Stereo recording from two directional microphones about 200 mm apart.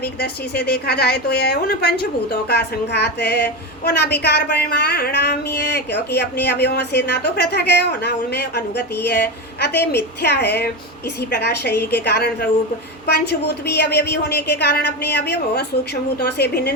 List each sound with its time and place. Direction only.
0.0 s a woman's voice: 55° left (ahead or behind)